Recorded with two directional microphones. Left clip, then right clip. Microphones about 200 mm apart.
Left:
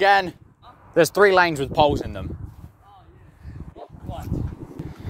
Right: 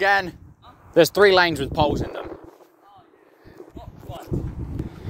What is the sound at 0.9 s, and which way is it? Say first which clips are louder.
Speech: right 1 dB; 5° right (ahead or behind).